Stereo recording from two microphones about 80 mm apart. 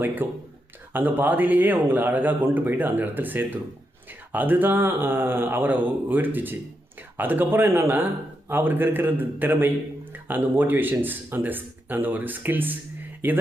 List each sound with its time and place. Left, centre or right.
0.2 s a man's voice: right